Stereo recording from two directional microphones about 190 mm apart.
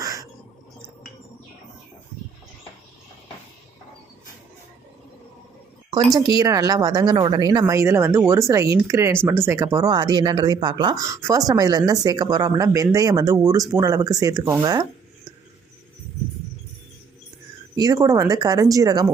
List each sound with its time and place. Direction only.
0.0 s a sound: 15° right (ahead or behind)
5.9 s speech: 20° right (ahead or behind)
17.7 s speech: 20° right (ahead or behind)